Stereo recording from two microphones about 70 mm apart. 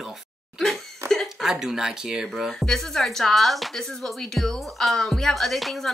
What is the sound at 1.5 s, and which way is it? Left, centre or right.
Speech, centre.